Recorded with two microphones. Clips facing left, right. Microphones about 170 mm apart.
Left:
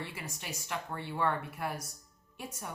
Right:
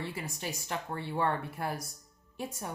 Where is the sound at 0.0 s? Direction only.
35° right (ahead or behind).